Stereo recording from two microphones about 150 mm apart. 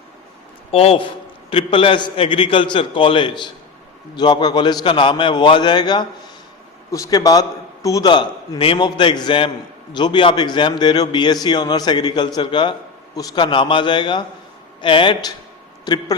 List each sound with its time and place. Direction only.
0.7 s a man's voice: 40° left (ahead or behind)